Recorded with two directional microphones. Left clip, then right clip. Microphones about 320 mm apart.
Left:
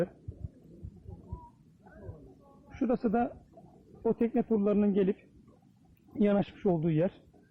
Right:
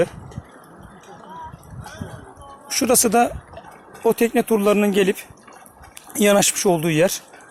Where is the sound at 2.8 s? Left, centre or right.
Centre.